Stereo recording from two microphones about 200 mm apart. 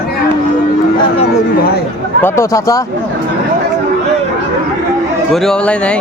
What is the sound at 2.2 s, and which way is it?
Speech, 15° left (ahead or behind).